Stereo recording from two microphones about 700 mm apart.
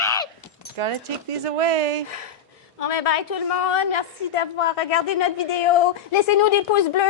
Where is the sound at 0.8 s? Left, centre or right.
Right.